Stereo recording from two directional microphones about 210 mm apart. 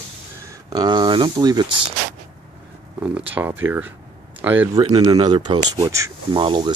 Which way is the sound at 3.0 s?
5° right (ahead or behind).